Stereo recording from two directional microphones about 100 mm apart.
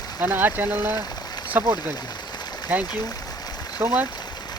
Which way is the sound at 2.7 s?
20° right (ahead or behind).